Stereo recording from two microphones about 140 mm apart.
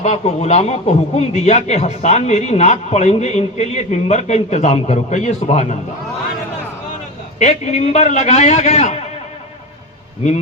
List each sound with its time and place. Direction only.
0.0 s a man's voice: 50° left (ahead or behind)
7.3 s a man's voice: 55° left (ahead or behind)